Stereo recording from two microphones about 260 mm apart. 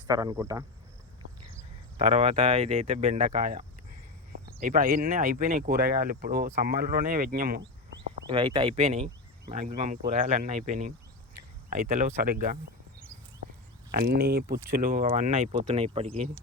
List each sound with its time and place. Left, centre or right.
0.1 s speech: centre
2.0 s speech: right
8.3 s speech: centre
14.2 s speech: right